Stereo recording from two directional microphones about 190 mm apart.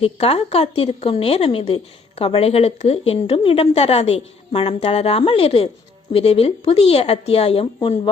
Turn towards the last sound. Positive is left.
turn(degrees=30)  # may be behind; listen again after turning